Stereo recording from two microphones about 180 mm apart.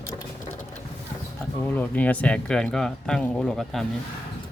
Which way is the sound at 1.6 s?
10° left (ahead or behind).